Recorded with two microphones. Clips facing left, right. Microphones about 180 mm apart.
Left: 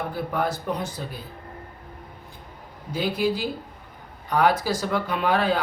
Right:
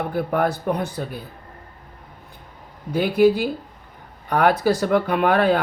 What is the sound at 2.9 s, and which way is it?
Speech, 60° right (ahead or behind).